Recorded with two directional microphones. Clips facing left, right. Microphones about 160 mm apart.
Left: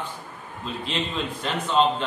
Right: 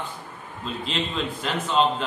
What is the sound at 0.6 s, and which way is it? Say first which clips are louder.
Speech: even; centre (ahead or behind).